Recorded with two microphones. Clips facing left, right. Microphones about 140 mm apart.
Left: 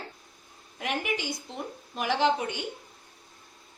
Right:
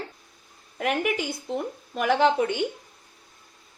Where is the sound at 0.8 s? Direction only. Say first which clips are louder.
Right 5 dB; 45° right (ahead or behind).